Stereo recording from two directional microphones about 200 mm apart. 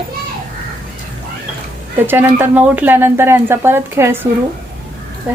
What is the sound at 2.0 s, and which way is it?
Speech, 10° right (ahead or behind).